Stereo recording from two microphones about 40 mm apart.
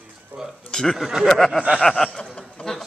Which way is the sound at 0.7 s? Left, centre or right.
Centre.